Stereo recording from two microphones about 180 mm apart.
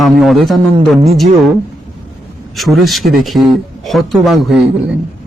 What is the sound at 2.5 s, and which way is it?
A man's voice, centre (ahead or behind).